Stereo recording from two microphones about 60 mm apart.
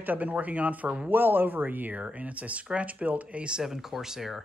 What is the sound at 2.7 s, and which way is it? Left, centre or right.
Speech, right.